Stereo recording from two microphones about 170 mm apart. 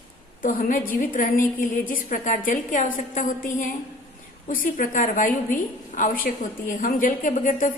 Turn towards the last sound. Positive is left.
turn(degrees=50)  # may be behind; listen again after turning